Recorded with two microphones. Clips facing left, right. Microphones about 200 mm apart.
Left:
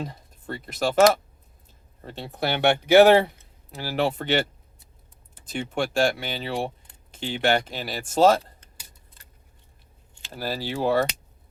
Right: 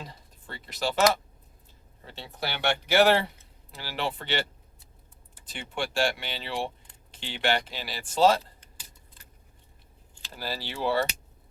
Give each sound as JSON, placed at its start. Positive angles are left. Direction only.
{"t": 0.0, "sound": "speech", "side_deg": 50}
{"t": 2.0, "sound": "speech", "side_deg": 50}
{"t": 5.5, "sound": "speech", "side_deg": 45}
{"t": 10.3, "sound": "speech", "side_deg": 45}